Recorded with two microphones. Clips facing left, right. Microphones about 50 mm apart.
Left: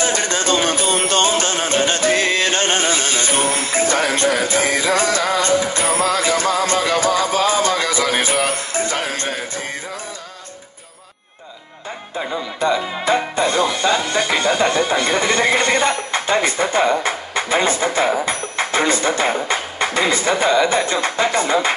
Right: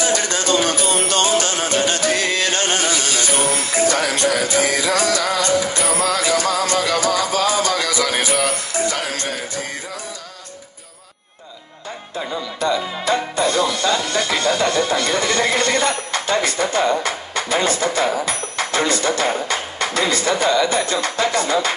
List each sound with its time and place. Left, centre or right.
0.0 s music: left
12.2 s speech: left